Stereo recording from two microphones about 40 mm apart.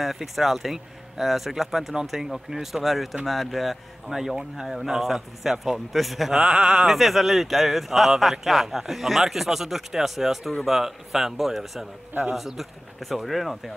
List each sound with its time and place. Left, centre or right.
0.0 s speech: centre
4.1 s a man's voice: centre
6.3 s a sound: centre
6.9 s a man's voice: centre